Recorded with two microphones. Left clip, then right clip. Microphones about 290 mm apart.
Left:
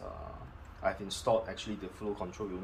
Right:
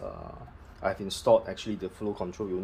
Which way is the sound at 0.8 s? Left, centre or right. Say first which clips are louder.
Right 4 dB; right.